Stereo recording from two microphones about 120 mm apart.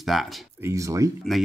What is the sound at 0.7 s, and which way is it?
Speech, 25° right (ahead or behind).